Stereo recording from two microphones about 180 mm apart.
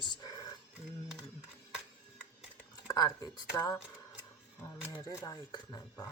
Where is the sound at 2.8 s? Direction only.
20° left (ahead or behind).